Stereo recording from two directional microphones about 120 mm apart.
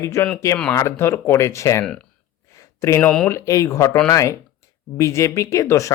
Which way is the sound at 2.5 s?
25° left (ahead or behind).